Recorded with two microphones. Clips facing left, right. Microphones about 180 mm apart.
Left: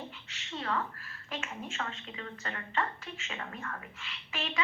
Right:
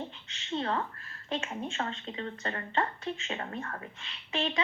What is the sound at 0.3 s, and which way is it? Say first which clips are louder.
A woman's voice: right 3 dB; 30° right (ahead or behind).